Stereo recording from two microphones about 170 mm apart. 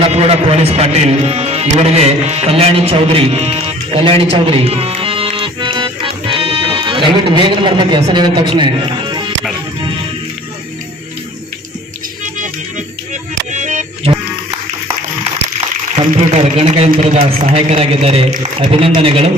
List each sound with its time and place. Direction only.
0.0 s a man's voice: 35° right (ahead or behind)
1.8 s music: 40° right (ahead or behind)
13.5 s music: 45° right (ahead or behind)
16.0 s a man's voice: 35° right (ahead or behind)